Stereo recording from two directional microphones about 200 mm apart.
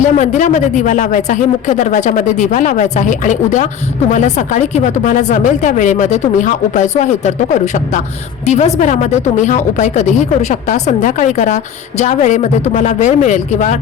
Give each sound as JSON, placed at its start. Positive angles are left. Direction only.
{"t": 0.0, "sound": "a woman's voice", "side_deg": 40}